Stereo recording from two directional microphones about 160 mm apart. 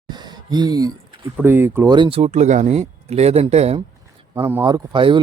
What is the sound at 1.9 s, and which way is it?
Speech, 30° right (ahead or behind).